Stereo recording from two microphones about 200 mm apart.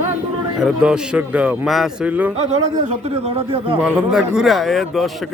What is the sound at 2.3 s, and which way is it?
Speech, 35° right (ahead or behind).